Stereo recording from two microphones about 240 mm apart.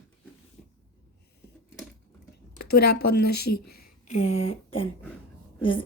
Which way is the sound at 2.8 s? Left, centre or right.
Left.